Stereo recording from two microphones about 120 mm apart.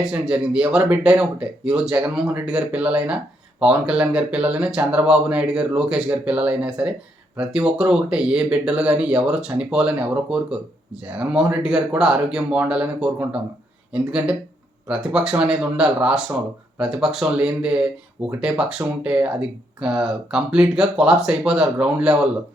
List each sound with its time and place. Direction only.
0.0 s speech: 5° right (ahead or behind)